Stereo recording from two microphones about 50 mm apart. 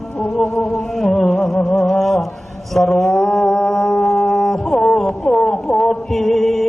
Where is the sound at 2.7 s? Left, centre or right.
Centre.